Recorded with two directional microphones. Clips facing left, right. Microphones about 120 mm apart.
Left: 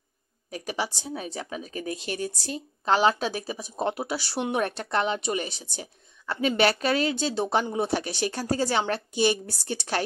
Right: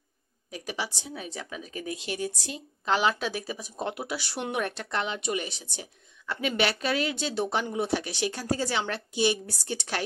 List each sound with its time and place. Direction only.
0.5 s a woman's voice: 45° left (ahead or behind)